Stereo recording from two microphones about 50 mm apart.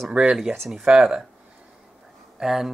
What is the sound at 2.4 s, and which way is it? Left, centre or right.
Speech, centre.